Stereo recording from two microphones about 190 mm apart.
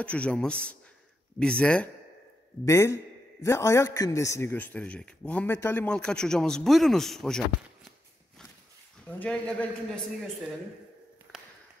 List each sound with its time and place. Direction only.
0.0 s a man's voice: 5° left (ahead or behind)
9.0 s a man's voice: 10° left (ahead or behind)
11.3 s a sound: 5° left (ahead or behind)